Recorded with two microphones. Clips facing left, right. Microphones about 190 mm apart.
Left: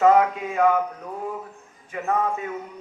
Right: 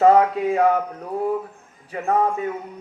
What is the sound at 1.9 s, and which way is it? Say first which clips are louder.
Speech: right 2 dB; 35° right (ahead or behind).